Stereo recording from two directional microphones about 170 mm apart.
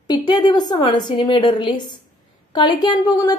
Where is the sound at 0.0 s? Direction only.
25° left (ahead or behind).